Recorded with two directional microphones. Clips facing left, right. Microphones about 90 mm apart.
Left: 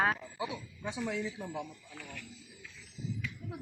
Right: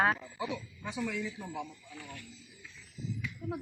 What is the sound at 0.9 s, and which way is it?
Speech, 30° left (ahead or behind).